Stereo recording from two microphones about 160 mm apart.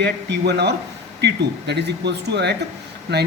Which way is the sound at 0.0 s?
90° right.